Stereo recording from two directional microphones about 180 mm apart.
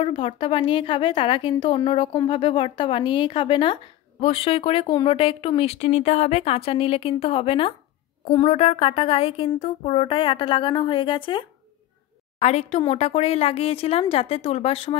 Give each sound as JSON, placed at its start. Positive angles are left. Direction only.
{"t": 0.0, "sound": "a woman's voice", "side_deg": 30}